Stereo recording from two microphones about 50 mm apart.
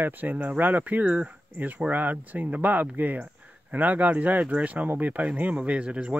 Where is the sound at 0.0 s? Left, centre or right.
Right.